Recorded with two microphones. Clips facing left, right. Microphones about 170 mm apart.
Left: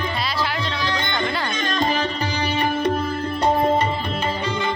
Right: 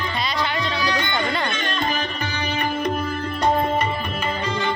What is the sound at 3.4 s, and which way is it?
Tabla, 25° left (ahead or behind).